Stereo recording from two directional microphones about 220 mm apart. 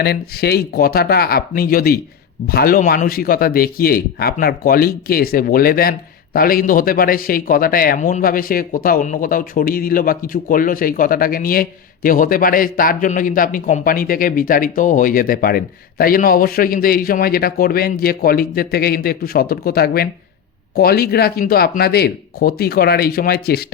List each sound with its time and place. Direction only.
0.0 s speech: 45° left (ahead or behind)